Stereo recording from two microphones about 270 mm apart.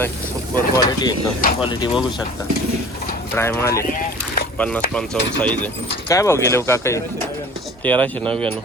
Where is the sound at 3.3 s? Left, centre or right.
Centre.